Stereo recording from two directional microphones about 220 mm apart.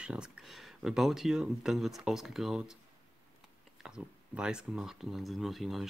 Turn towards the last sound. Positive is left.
turn(degrees=0)  # may be behind; listen again after turning